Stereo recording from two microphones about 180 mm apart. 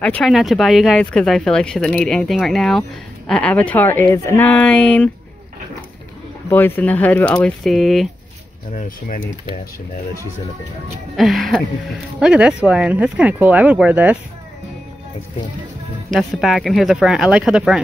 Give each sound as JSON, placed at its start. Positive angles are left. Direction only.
{"t": 0.0, "sound": "speech", "side_deg": 5}
{"t": 6.5, "sound": "speech", "side_deg": 10}
{"t": 8.7, "sound": "speech", "side_deg": 45}
{"t": 11.1, "sound": "speech", "side_deg": 0}
{"t": 16.1, "sound": "speech", "side_deg": 0}